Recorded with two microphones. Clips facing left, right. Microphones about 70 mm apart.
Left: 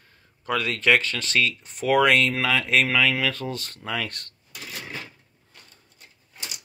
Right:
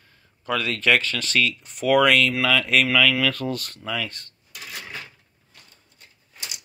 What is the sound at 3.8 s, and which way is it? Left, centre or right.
Speech, left.